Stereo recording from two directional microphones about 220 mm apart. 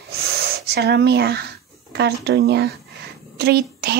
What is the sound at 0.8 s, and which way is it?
A woman's voice, 50° right (ahead or behind).